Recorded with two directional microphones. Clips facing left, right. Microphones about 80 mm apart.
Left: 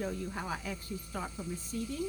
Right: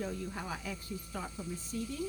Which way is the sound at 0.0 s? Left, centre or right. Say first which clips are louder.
Left 2 dB; left.